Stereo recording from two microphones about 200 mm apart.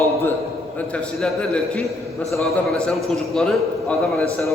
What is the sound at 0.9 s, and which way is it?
A man's voice, 5° left (ahead or behind).